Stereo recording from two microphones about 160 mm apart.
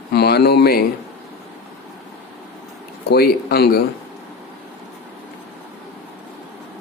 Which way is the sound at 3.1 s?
75° left (ahead or behind).